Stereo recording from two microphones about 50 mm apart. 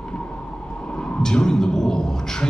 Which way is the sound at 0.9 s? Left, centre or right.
Centre.